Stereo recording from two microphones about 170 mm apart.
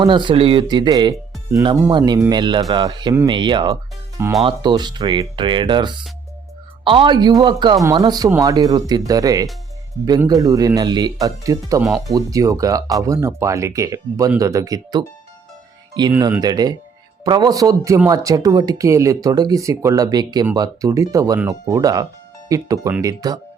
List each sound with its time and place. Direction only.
0.0 s speech: 30° right (ahead or behind)
11.8 s speech: centre (ahead or behind)
12.1 s speech: 20° right (ahead or behind)